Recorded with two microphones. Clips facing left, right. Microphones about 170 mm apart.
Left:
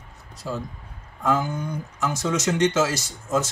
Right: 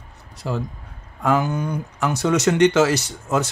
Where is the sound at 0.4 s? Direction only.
65° right (ahead or behind).